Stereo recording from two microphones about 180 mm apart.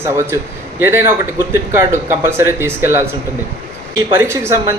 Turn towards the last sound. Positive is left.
turn(degrees=-15)  # may be behind; listen again after turning